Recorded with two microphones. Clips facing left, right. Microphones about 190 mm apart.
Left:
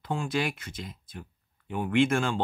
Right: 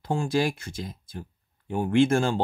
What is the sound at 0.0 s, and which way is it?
Speech, 30° right (ahead or behind).